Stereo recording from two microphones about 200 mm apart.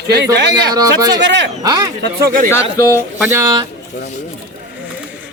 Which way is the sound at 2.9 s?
10° right (ahead or behind).